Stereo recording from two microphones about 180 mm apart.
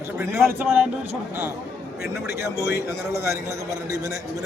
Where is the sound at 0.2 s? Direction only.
15° right (ahead or behind).